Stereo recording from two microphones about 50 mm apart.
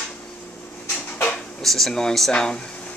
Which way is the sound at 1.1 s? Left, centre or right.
Left.